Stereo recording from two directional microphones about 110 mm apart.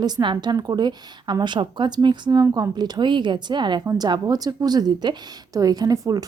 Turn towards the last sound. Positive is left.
turn(degrees=-35)  # may be behind; listen again after turning